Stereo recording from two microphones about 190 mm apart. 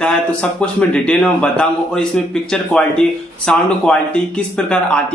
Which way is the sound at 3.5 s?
5° left (ahead or behind).